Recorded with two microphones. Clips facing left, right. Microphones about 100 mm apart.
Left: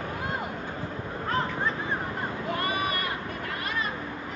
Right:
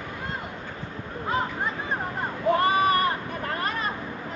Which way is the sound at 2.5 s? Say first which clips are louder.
Right 10 dB; 30° right (ahead or behind).